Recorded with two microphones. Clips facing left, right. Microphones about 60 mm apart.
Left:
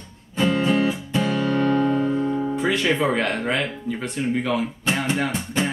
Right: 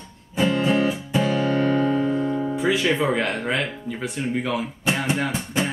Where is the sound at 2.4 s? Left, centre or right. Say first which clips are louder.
Even; centre.